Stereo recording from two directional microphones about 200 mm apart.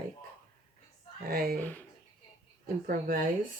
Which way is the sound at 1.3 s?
45° right (ahead or behind).